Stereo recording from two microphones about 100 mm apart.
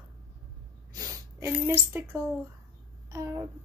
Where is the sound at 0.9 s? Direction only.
40° right (ahead or behind).